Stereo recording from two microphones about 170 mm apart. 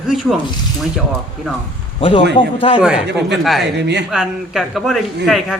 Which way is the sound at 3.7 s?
80° right.